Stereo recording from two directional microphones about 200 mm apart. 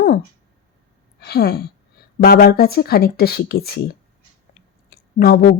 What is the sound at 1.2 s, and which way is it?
Speech, 50° left (ahead or behind).